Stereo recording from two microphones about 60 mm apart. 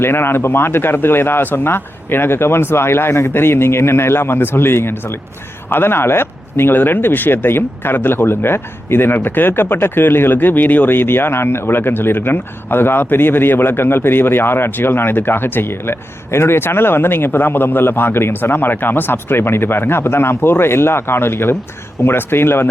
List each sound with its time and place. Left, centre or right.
0.0 s speech: left